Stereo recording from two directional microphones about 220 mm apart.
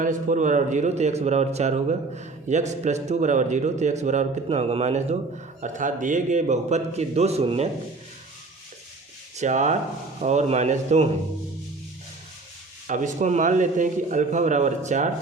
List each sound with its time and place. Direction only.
0.0 s speech: 35° right (ahead or behind)
9.3 s speech: 35° right (ahead or behind)
12.9 s speech: 35° right (ahead or behind)